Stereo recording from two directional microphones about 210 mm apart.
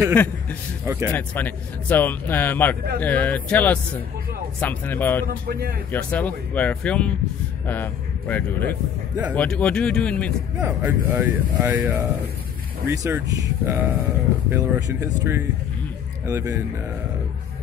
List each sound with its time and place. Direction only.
0.1 s a man's voice: 5° left (ahead or behind)
0.8 s speech: 15° right (ahead or behind)
1.1 s a man's voice: 10° left (ahead or behind)
5.5 s speech: 50° right (ahead or behind)
5.9 s a man's voice: 5° left (ahead or behind)
10.6 s speech: 10° right (ahead or behind)